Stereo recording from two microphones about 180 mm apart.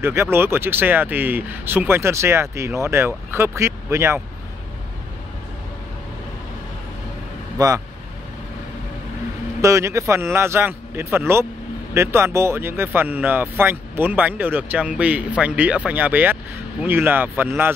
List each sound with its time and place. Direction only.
0.0 s speech: 15° right (ahead or behind)
7.5 s speech: 20° right (ahead or behind)
9.6 s speech: 15° right (ahead or behind)